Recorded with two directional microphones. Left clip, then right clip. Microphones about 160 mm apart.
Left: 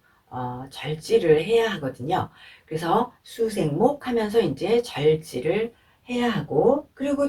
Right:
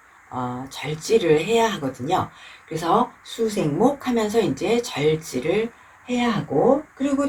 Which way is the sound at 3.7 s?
20° right (ahead or behind).